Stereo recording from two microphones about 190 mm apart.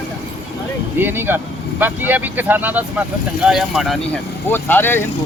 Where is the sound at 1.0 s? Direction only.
10° right (ahead or behind).